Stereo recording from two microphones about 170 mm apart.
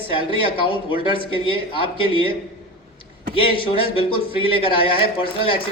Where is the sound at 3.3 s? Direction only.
30° left (ahead or behind).